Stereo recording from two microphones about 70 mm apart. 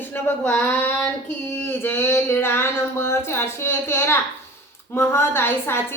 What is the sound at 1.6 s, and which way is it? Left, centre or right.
A woman's voice, left.